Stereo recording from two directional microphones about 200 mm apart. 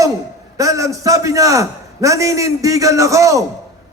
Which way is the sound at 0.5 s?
15° right (ahead or behind).